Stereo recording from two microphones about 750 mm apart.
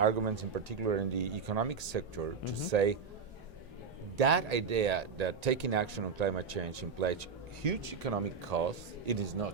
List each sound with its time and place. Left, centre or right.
0.0 s speech: right
4.2 s speech: right